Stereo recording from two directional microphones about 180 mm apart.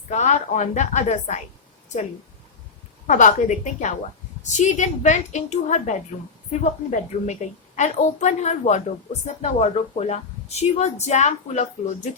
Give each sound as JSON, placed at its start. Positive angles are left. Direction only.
{"t": 0.1, "sound": "a woman's voice", "side_deg": 40}
{"t": 3.1, "sound": "a woman's voice", "side_deg": 45}